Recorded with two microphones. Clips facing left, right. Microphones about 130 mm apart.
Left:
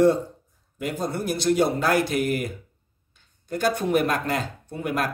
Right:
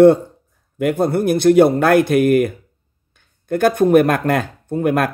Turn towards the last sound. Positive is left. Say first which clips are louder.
# right 10 dB
turn(degrees=-55)  # may be behind; listen again after turning